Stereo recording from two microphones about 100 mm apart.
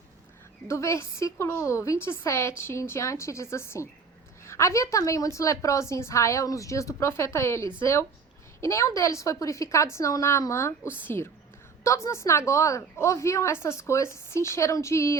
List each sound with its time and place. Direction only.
0.7 s a woman's voice: 30° left (ahead or behind)